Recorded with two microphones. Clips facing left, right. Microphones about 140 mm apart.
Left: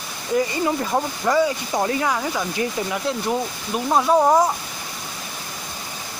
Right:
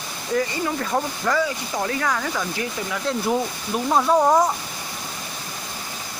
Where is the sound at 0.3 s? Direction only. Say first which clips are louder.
Left 3 dB; 15° left (ahead or behind).